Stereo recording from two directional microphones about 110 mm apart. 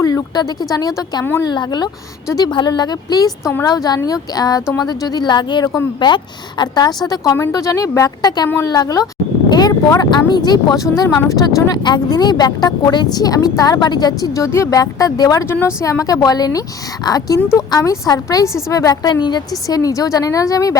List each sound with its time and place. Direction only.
0.0 s speech: 35° left (ahead or behind)
1.2 s a woman's voice: 20° left (ahead or behind)
1.5 s speech: 40° left (ahead or behind)